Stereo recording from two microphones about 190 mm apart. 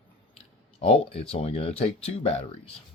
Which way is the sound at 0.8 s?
30° left (ahead or behind).